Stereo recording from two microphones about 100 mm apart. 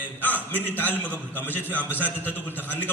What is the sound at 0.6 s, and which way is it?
A man's voice, 20° left (ahead or behind).